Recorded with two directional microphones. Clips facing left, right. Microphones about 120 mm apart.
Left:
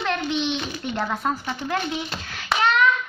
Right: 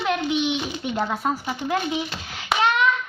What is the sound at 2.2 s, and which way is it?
Hands, 20° right (ahead or behind).